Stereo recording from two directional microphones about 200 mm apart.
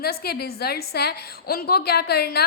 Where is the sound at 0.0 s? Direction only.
50° left (ahead or behind).